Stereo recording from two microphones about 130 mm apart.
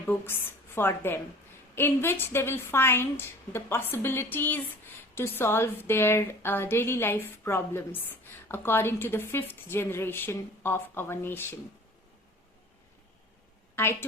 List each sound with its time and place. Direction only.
0.8 s a woman's voice: 15° left (ahead or behind)
13.7 s a woman's voice: 20° left (ahead or behind)